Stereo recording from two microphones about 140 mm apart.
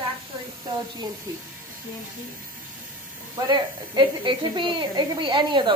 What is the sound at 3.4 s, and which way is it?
Speech, 35° right (ahead or behind).